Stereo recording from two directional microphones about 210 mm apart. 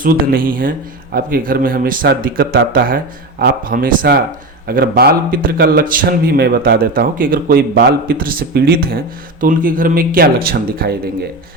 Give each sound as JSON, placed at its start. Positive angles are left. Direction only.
{"t": 0.0, "sound": "a man's voice", "side_deg": -40}